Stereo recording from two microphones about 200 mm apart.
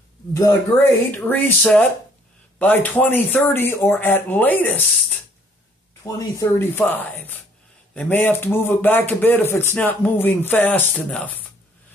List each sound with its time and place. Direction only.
0.3 s speech: 15° left (ahead or behind)